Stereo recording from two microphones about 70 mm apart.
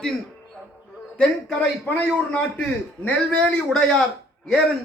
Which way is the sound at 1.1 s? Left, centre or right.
Centre.